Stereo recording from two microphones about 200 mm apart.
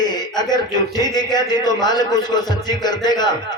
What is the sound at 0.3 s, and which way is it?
A man's voice, 20° left (ahead or behind).